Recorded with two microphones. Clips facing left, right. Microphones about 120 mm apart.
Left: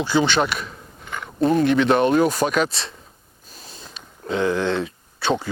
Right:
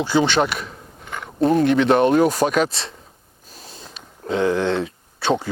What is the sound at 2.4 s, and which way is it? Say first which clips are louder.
Speech: right 2 dB; 60° right (ahead or behind).